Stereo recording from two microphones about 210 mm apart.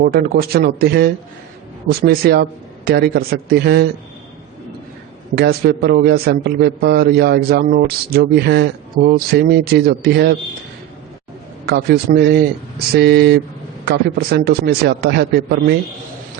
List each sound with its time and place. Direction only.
0.0 s a man's voice: 45° right (ahead or behind)
5.3 s a man's voice: 50° right (ahead or behind)
11.6 s a man's voice: 50° right (ahead or behind)